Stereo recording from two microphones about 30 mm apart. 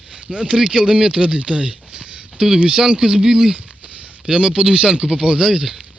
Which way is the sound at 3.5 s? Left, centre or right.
Right.